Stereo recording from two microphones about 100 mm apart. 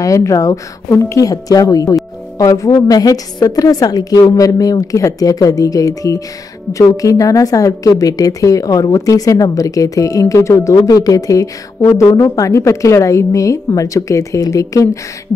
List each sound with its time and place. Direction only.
0.0 s a woman's voice: 35° left (ahead or behind)